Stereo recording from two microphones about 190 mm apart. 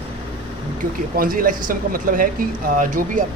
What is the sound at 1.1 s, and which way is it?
Speech, 50° right (ahead or behind).